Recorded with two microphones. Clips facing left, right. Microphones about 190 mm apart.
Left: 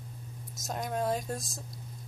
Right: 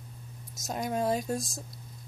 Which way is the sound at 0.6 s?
5° right (ahead or behind).